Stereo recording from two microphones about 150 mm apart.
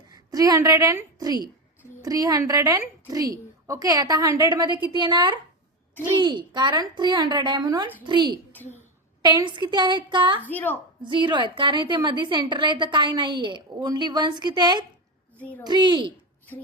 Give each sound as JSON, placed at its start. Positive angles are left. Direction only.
{"t": 0.1, "sound": "a woman's voice", "side_deg": -25}
{"t": 8.5, "sound": "a woman's voice", "side_deg": 15}
{"t": 9.2, "sound": "a woman's voice", "side_deg": -30}
{"t": 10.4, "sound": "a woman's voice", "side_deg": 10}
{"t": 11.0, "sound": "a woman's voice", "side_deg": -30}
{"t": 15.4, "sound": "a woman's voice", "side_deg": 10}
{"t": 15.6, "sound": "a woman's voice", "side_deg": -30}